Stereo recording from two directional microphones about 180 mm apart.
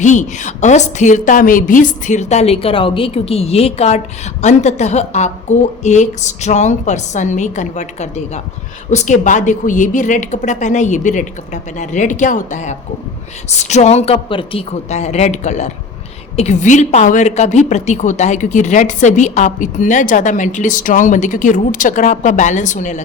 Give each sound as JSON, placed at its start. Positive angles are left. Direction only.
{"t": 0.0, "sound": "a woman's voice", "side_deg": 40}